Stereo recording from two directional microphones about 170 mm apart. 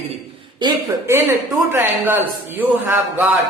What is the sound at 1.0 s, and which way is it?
A man's voice, 15° right (ahead or behind).